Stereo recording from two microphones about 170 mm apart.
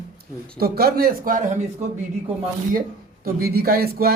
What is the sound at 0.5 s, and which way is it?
Speech, 65° right (ahead or behind).